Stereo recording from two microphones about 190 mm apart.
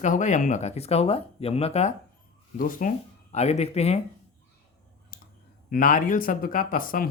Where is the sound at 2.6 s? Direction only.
45° left (ahead or behind).